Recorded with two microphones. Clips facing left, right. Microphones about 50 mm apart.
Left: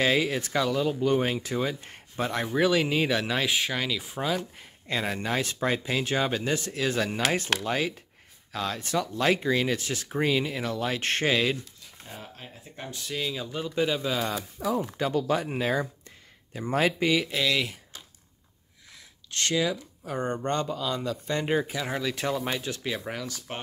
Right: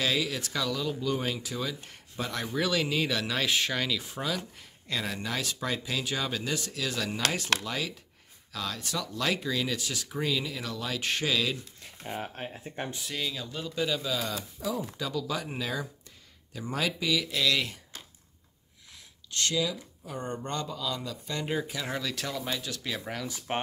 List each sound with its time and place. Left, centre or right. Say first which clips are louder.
0.0 s speech: left 5 dB; left
2.5 s speech: left 5 dB; left
3.3 s speech: left 1 dB; centre
4.8 s speech: left 4 dB; left
12.1 s speech: right 7 dB; right
13.0 s speech: left 3 dB; centre; by 14.4 s left
14.8 s speech: left 6 dB; left
17.3 s speech: left 1 dB; left
19.3 s speech: left 3 dB; left
21.6 s speech: left 4 dB; centre
22.1 s speech: left 5 dB; left
22.9 s speech: left 2 dB; centre
23.5 s speech: right 7 dB; right